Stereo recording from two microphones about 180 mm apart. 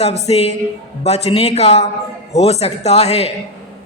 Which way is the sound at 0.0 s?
35° left (ahead or behind).